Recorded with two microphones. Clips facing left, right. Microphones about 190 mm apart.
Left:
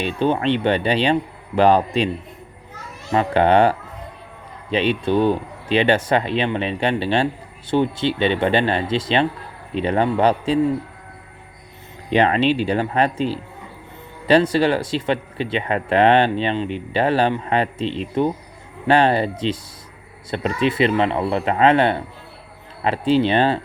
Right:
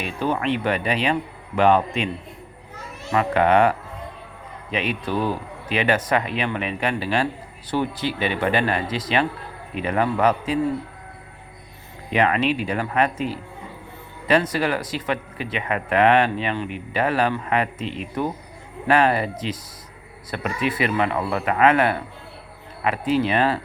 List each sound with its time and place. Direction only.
0.0 s speech: 30° left (ahead or behind)
3.1 s speech: 30° left (ahead or behind)
12.1 s speech: 30° left (ahead or behind)